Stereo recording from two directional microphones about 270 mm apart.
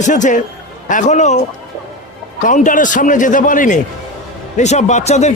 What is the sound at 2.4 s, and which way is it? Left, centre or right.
A man's voice, left.